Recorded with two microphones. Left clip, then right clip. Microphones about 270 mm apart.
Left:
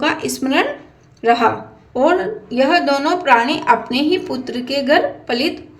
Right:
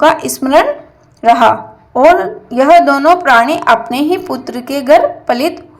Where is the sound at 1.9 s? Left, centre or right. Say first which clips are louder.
Right 8 dB; centre.